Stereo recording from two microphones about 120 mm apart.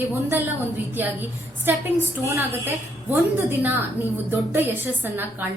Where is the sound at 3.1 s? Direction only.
15° right (ahead or behind).